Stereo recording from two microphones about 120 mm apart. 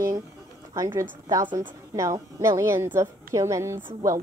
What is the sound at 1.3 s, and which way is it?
A woman's voice, 35° right (ahead or behind).